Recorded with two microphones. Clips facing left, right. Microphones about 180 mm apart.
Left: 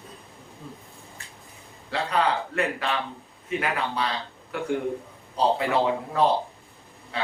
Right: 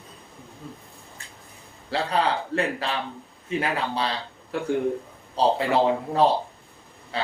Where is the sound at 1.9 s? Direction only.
30° right (ahead or behind).